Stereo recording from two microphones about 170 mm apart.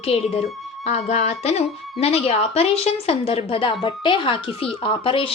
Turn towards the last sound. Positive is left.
turn(degrees=30)  # may be behind; listen again after turning